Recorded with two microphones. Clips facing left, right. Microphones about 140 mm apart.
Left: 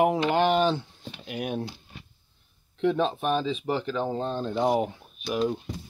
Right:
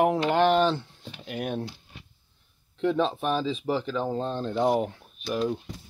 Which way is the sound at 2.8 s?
Centre (ahead or behind).